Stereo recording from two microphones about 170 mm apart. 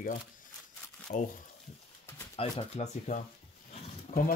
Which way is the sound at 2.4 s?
35° left (ahead or behind).